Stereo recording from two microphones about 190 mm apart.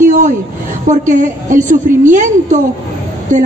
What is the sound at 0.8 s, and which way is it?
A woman's voice, 40° right (ahead or behind).